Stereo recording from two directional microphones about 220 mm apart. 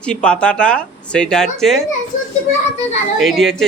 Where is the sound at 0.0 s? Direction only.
5° left (ahead or behind).